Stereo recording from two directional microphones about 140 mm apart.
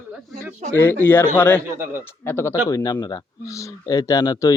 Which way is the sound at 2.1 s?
15° left (ahead or behind).